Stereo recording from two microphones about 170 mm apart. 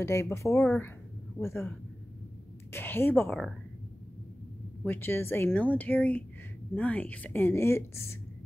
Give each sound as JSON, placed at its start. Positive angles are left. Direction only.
{"t": 0.0, "sound": "a woman's voice", "side_deg": 15}
{"t": 2.7, "sound": "a woman's voice", "side_deg": 15}
{"t": 4.8, "sound": "a woman's voice", "side_deg": 10}